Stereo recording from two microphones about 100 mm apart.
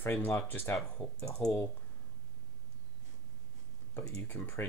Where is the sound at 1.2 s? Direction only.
35° left (ahead or behind).